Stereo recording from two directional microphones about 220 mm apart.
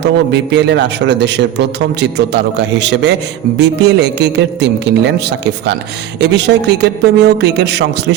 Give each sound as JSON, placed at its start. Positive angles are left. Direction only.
{"t": 0.0, "sound": "a man's voice", "side_deg": -50}
{"t": 6.1, "sound": "a man's voice", "side_deg": -50}